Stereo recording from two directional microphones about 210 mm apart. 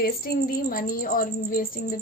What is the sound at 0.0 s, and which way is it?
A woman's voice, 45° left (ahead or behind).